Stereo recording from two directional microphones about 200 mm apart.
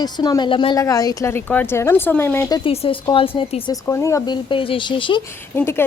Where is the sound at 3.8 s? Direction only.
15° left (ahead or behind).